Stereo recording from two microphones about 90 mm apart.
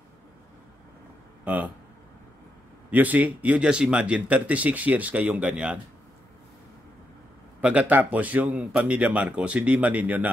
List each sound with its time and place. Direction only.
1.4 s speech: 20° right (ahead or behind)
2.9 s speech: 15° right (ahead or behind)
7.6 s speech: 15° right (ahead or behind)